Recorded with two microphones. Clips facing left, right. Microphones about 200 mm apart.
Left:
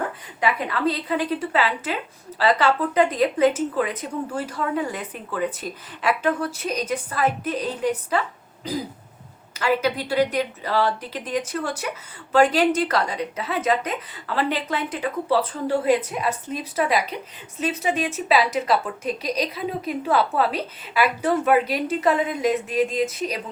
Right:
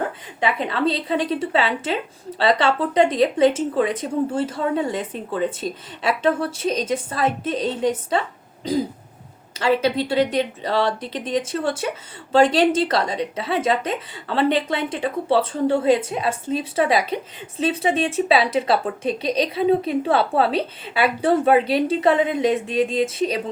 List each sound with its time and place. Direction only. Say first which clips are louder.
0.3 s speech: right 2 dB; 25° right (ahead or behind)
9.6 s speech: right 3 dB; 30° right (ahead or behind)